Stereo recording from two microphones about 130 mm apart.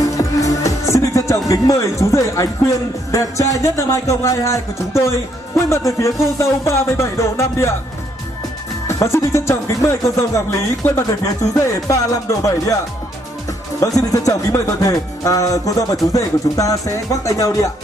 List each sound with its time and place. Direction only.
0.2 s music: 25° left (ahead or behind)
1.5 s speech: 25° left (ahead or behind)
8.8 s speech: 20° left (ahead or behind)
13.7 s speech: 25° left (ahead or behind)